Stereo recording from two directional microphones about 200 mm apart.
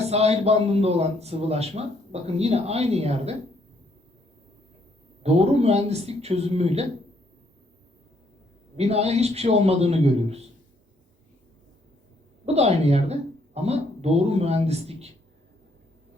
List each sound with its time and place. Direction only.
0.1 s a man's voice: 30° right (ahead or behind)
5.2 s a man's voice: 30° right (ahead or behind)
8.7 s a man's voice: 30° right (ahead or behind)
12.5 s speech: 30° right (ahead or behind)